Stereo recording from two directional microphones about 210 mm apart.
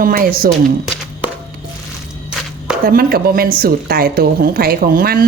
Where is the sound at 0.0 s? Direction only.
45° right (ahead or behind).